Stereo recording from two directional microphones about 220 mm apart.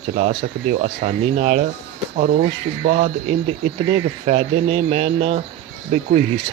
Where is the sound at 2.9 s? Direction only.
35° right (ahead or behind).